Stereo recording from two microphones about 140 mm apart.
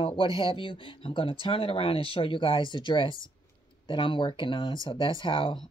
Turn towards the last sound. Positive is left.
turn(degrees=35)  # may be behind; listen again after turning